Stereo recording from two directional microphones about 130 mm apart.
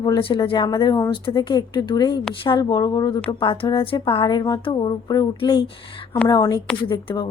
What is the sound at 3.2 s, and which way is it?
Speech, 40° left (ahead or behind).